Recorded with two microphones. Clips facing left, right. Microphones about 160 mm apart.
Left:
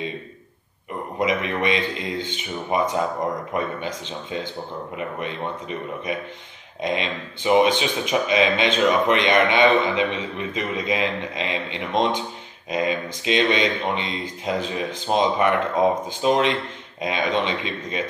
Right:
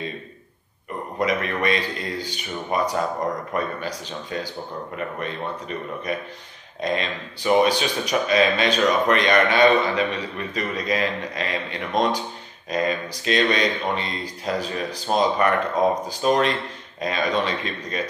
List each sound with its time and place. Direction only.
1.2 s a man's voice: 20° left (ahead or behind)